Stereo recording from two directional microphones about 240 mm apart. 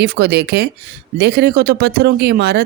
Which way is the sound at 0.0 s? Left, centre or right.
Right.